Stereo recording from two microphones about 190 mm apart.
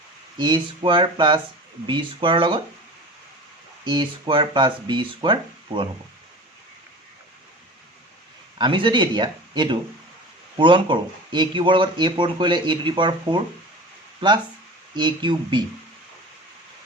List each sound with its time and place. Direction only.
0.3 s speech: 25° right (ahead or behind)
3.8 s speech: 25° right (ahead or behind)
8.5 s speech: 25° right (ahead or behind)